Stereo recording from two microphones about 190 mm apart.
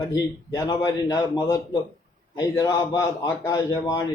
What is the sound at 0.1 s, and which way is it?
A man's voice, 20° left (ahead or behind).